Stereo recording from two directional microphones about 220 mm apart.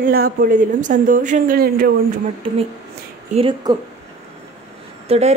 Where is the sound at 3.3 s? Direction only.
20° right (ahead or behind).